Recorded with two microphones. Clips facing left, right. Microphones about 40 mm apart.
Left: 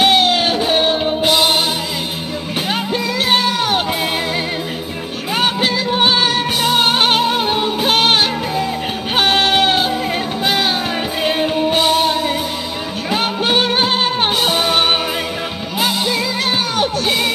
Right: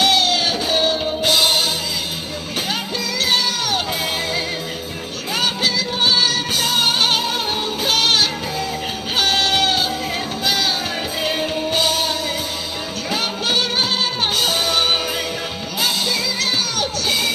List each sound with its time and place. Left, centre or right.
0.0 s music: left
1.2 s music: centre
3.3 s music: left
5.4 s music: left
9.1 s sheep: left
10.4 s music: left